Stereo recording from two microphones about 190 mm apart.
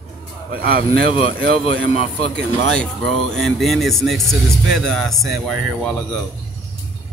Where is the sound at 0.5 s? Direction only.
50° right (ahead or behind).